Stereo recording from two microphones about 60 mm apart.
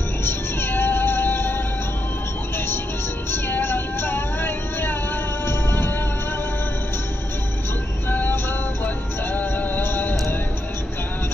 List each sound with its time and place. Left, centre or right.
0.2 s music: left
3.3 s vehicle: left
5.5 s music: left
8.1 s music: left